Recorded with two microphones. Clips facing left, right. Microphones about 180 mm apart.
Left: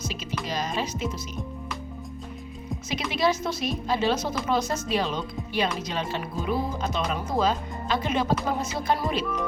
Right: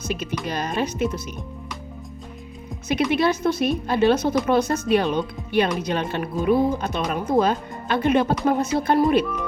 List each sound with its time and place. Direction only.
0.0 s a woman's voice: 55° right (ahead or behind)
3.1 s speech: 55° right (ahead or behind)